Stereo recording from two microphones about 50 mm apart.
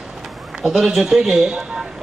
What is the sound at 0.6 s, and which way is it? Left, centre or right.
Speech, centre.